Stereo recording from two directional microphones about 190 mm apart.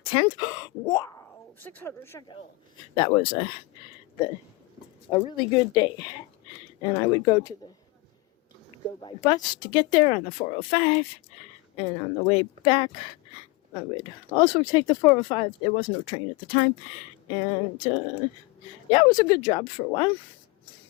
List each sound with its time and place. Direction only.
0.0 s speech: 30° left (ahead or behind)
3.2 s speech: 30° left (ahead or behind)
5.1 s speech: 25° left (ahead or behind)
9.0 s speech: 20° left (ahead or behind)